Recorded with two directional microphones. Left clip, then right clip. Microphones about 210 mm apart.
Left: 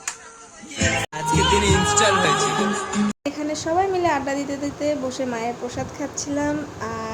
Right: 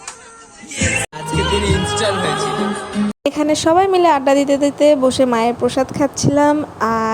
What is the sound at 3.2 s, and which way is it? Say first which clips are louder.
A woman's voice: right 10 dB; 40° right (ahead or behind).